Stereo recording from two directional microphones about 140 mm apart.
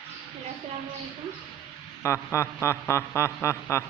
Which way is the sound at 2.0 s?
20° left (ahead or behind).